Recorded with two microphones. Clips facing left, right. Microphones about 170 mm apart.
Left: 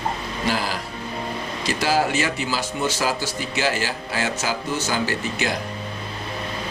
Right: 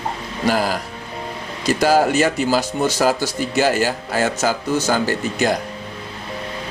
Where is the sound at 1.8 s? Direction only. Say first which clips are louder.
Right 6 dB; 45° right (ahead or behind).